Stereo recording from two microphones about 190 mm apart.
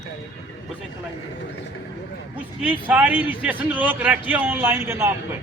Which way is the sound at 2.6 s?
5° right (ahead or behind).